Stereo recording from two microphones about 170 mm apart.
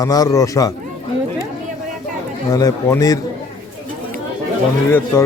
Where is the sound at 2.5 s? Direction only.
20° left (ahead or behind).